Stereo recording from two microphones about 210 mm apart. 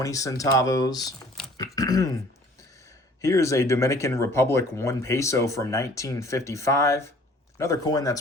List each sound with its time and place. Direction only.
0.0 s speech: 15° left (ahead or behind)
1.5 s a sound: 15° left (ahead or behind)
3.2 s speech: 15° left (ahead or behind)